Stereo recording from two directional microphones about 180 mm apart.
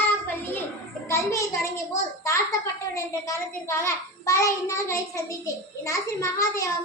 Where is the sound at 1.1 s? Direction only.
15° left (ahead or behind).